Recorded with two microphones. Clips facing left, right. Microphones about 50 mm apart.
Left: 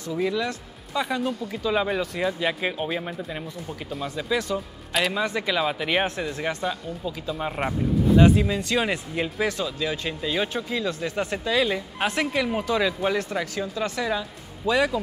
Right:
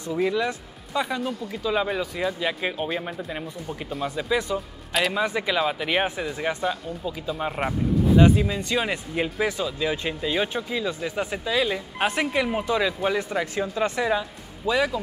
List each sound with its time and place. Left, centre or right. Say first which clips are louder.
0.2 s speech: right 2 dB; centre
1.0 s speech: left 2 dB; centre
4.6 s a man's voice: even; centre
12.1 s speech: even; centre
14.7 s speech: left 1 dB; centre